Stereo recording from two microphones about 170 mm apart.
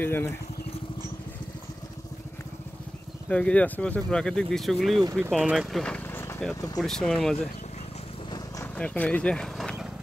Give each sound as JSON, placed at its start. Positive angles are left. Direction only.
{"t": 0.0, "sound": "speech", "side_deg": 15}
{"t": 3.3, "sound": "speech", "side_deg": 5}
{"t": 6.8, "sound": "speech", "side_deg": 5}
{"t": 8.7, "sound": "speech", "side_deg": 10}